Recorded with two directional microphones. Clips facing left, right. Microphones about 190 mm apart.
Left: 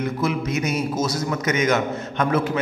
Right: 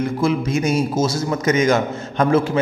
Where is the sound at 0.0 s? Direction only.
30° right (ahead or behind).